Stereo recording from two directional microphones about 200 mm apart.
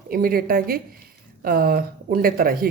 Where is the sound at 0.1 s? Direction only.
45° right (ahead or behind).